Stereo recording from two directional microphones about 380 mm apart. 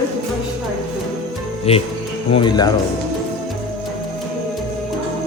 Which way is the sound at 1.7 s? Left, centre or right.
Centre.